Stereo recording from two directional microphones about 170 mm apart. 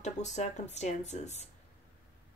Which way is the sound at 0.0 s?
45° left (ahead or behind).